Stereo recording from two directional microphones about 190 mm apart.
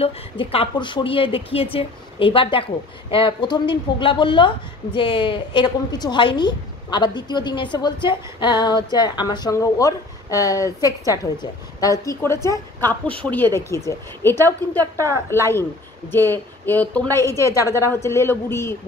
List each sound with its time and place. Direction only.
0.0 s a woman's voice: 30° left (ahead or behind); by 15.6 s 15° left (ahead or behind)
16.6 s a woman's voice: 10° left (ahead or behind)